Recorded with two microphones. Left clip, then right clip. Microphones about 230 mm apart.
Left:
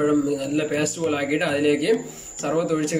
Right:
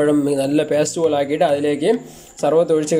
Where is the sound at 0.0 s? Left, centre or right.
Right.